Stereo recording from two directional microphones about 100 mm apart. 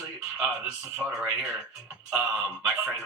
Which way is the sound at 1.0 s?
5° left (ahead or behind).